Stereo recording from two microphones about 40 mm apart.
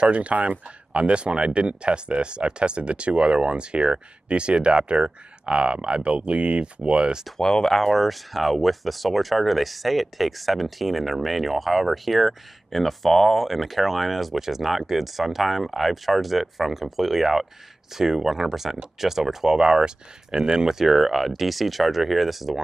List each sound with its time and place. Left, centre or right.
0.0 s speech: right
7.3 s speech: centre
7.7 s speech: centre